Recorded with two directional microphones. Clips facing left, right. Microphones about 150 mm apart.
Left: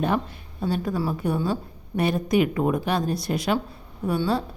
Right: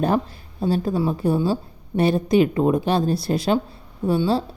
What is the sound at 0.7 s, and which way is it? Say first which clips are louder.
Speech: right 4 dB; 30° right (ahead or behind).